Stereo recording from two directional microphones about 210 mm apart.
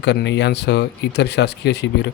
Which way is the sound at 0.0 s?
55° left (ahead or behind).